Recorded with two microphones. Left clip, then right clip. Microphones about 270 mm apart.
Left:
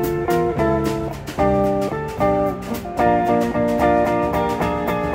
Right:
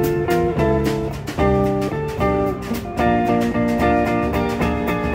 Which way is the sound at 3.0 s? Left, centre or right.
Centre.